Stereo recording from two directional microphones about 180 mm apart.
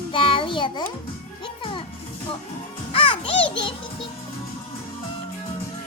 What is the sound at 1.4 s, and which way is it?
Music, 30° left (ahead or behind).